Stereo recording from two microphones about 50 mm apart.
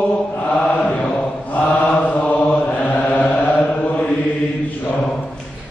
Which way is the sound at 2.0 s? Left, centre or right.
Left.